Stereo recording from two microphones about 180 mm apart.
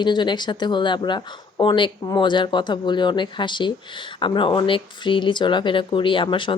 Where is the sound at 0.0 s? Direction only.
25° left (ahead or behind).